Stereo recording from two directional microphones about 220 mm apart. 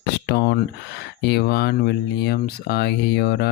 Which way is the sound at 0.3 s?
45° left (ahead or behind).